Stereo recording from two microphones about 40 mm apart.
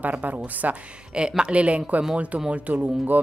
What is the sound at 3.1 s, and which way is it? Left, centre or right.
Music, right.